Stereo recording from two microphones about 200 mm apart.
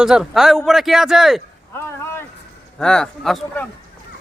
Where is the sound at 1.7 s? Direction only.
10° left (ahead or behind).